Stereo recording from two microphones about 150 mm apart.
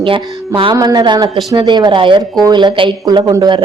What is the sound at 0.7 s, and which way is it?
A woman's voice, 25° right (ahead or behind).